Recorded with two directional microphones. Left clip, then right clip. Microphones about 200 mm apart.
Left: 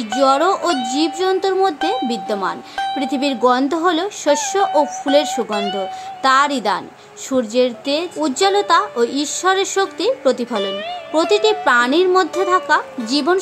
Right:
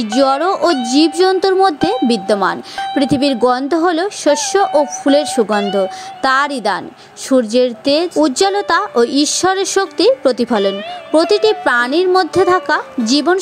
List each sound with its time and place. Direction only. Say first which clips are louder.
0.0 s speech: right 1 dB; 30° right (ahead or behind)
5.4 s speech: right 6 dB; centre (ahead or behind)
5.8 s speech: right 5 dB; 30° right (ahead or behind)